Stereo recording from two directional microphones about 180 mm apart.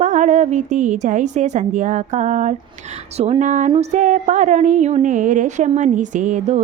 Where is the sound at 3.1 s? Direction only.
35° right (ahead or behind).